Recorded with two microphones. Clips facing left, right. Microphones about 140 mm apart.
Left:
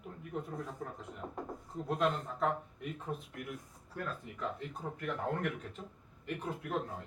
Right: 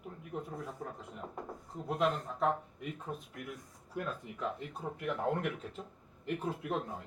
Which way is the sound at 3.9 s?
15° right (ahead or behind).